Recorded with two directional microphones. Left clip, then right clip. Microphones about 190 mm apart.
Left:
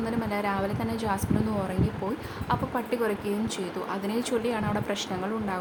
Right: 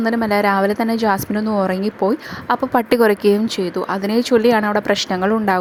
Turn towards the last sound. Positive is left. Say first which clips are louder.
# right 14 dB
turn(degrees=-45)  # may be behind; listen again after turning